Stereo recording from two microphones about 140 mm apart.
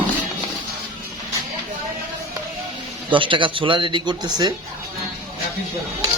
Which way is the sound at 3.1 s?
35° right (ahead or behind).